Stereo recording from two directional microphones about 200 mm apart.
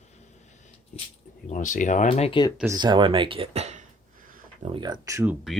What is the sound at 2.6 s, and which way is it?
Speech, 20° right (ahead or behind).